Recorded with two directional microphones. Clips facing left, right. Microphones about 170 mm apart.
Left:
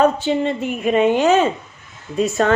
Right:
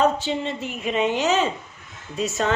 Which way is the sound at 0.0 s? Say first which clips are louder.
Left 5 dB; 55° left (ahead or behind).